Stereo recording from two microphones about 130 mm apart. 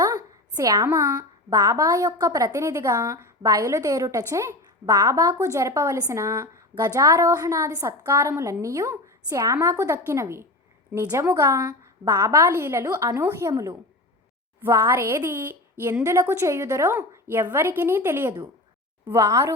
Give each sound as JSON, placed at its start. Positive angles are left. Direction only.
{"t": 0.5, "sound": "a child's voice", "side_deg": -30}